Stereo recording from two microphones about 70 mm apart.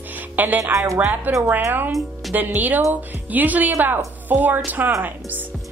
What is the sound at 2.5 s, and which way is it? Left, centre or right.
A woman's voice, right.